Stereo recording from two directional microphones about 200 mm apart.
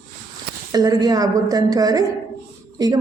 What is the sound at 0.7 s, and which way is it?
A woman's voice, 20° right (ahead or behind).